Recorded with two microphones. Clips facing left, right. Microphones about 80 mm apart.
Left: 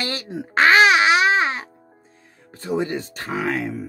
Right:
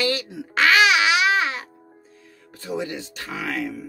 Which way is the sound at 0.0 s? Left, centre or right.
Left.